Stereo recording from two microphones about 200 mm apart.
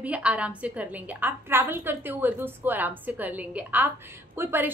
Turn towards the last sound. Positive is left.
turn(degrees=-10)  # may be behind; listen again after turning